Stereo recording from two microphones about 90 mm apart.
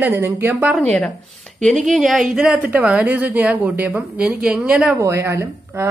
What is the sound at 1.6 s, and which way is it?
A woman's voice, centre (ahead or behind).